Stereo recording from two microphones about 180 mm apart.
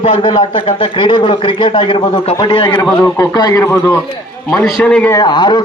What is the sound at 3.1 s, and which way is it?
Speech, 20° left (ahead or behind).